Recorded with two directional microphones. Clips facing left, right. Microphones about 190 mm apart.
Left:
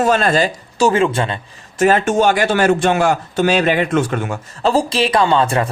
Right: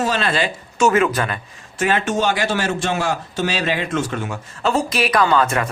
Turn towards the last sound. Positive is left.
turn(degrees=30)  # may be behind; listen again after turning